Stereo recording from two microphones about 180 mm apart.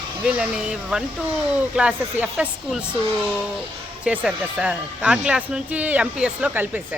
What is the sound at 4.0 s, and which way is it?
Speech, 5° right (ahead or behind).